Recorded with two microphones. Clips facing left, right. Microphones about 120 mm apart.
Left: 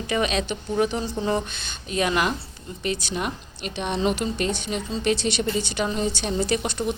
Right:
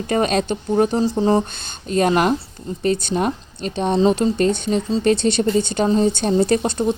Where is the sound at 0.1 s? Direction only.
45° right (ahead or behind).